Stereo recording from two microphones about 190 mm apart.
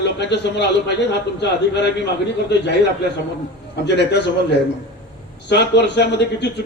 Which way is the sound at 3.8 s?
60° left (ahead or behind).